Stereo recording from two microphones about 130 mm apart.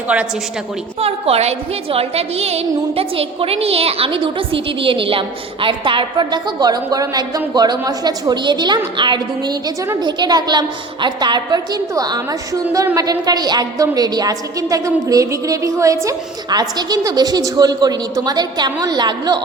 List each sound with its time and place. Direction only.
0.1 s a woman's voice: 5° right (ahead or behind)
0.9 s a woman's voice: 50° right (ahead or behind); by 19.4 s 35° right (ahead or behind)